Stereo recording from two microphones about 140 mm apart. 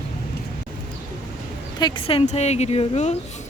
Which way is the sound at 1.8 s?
35° left (ahead or behind).